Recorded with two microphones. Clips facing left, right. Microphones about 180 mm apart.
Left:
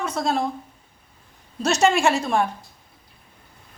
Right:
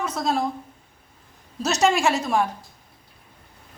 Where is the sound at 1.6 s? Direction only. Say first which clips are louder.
Left 2 dB; centre (ahead or behind).